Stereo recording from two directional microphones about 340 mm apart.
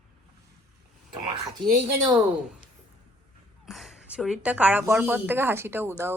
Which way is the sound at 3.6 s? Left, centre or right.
Centre.